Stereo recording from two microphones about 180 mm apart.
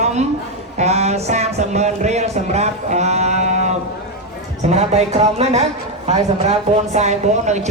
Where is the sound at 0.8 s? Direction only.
35° right (ahead or behind).